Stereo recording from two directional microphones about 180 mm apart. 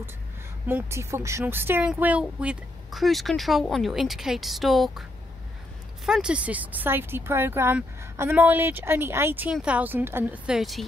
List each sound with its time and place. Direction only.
0.7 s speech: 10° right (ahead or behind)
6.0 s speech: 5° right (ahead or behind)